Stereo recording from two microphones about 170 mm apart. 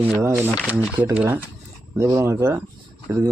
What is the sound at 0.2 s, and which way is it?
Speech, 15° right (ahead or behind).